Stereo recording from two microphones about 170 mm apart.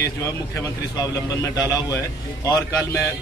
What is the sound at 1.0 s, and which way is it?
A man's voice, 20° left (ahead or behind).